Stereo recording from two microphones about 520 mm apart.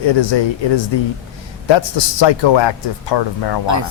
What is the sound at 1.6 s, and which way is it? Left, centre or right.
Speech, left.